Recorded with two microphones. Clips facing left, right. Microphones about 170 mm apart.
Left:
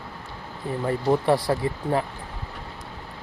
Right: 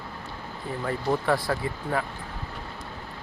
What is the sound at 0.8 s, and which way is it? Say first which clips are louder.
Speech: left 4 dB; 25° left (ahead or behind).